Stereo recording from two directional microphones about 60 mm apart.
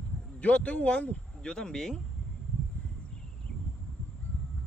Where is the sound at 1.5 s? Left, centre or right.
Centre.